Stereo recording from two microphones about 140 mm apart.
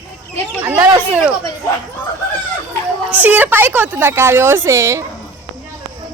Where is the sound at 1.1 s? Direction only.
10° right (ahead or behind).